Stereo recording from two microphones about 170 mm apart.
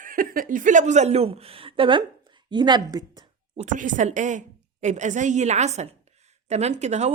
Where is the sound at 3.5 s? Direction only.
45° right (ahead or behind).